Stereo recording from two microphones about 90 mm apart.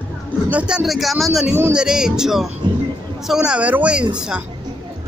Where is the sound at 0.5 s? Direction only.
15° right (ahead or behind).